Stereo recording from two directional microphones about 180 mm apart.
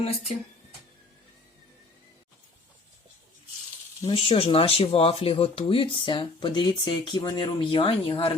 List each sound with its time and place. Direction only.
4.0 s speech: 30° left (ahead or behind)